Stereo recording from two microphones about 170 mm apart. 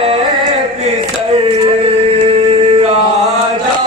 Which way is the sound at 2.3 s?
35° right (ahead or behind).